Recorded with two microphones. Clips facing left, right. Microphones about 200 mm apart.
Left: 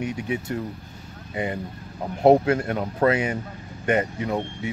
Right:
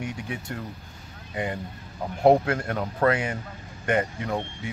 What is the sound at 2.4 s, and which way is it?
Speech, 25° left (ahead or behind).